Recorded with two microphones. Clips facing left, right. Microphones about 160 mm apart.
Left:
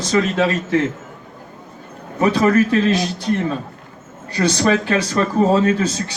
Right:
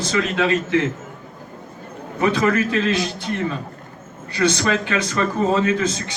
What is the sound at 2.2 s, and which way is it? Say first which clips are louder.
Speech: left 4 dB; 35° left (ahead or behind).